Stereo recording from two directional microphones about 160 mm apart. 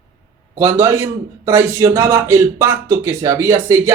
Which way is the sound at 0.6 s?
15° right (ahead or behind).